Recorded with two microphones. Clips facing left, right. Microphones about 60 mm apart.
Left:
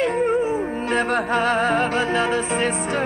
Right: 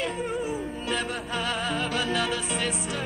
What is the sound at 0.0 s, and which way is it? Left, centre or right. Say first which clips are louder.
Music: left 10 dB; left.